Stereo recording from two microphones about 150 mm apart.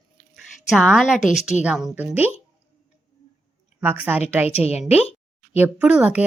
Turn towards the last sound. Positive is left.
turn(degrees=-10)  # may be behind; listen again after turning